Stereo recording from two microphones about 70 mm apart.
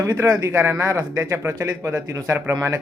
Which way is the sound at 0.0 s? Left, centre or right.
Right.